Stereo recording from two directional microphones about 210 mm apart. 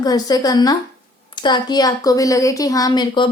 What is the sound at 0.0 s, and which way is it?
A woman's voice, 20° left (ahead or behind).